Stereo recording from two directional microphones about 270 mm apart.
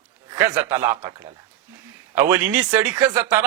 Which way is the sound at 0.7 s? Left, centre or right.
Centre.